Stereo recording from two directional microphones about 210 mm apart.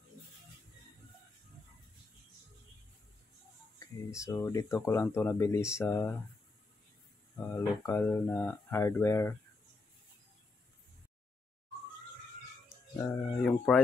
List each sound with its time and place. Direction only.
4.1 s speech: 15° left (ahead or behind)
7.3 s speech: 10° left (ahead or behind)
12.9 s a sound: 5° left (ahead or behind)